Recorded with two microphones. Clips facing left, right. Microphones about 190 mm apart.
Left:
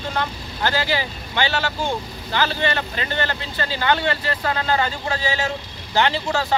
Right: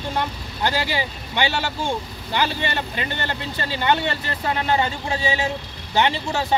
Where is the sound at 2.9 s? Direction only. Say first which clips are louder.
Left 2 dB; 20° right (ahead or behind).